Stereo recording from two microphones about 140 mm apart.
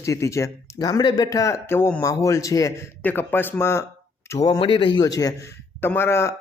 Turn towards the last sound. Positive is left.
turn(degrees=20)  # may be behind; listen again after turning